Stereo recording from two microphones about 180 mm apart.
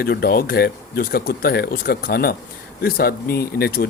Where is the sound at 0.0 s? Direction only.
60° left (ahead or behind).